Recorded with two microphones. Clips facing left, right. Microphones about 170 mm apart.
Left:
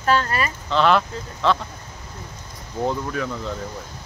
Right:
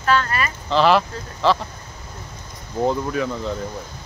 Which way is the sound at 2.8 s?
5° right (ahead or behind).